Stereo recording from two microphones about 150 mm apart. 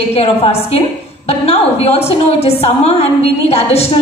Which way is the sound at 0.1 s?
40° left (ahead or behind).